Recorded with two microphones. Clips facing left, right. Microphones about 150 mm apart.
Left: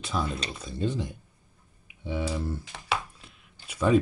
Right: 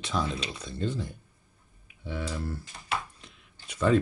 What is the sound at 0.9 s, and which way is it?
Speech, 15° left (ahead or behind).